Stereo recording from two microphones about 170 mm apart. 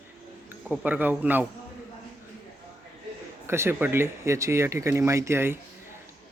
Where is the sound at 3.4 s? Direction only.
15° right (ahead or behind).